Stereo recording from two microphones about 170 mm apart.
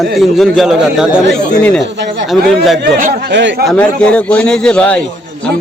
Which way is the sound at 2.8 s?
55° right (ahead or behind).